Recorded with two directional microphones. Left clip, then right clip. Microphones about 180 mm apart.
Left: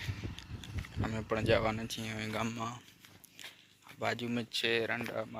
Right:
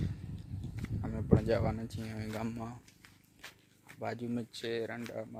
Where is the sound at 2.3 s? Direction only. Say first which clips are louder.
Left 3 dB; 5° right (ahead or behind).